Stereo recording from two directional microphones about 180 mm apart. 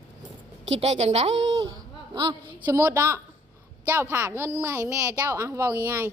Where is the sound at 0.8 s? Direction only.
35° right (ahead or behind).